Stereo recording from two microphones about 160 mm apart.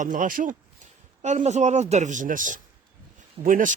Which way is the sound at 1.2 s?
45° right (ahead or behind).